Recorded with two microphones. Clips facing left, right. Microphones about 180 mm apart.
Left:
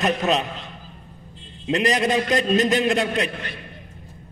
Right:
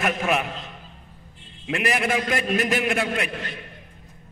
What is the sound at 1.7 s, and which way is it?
A man's voice, 20° left (ahead or behind).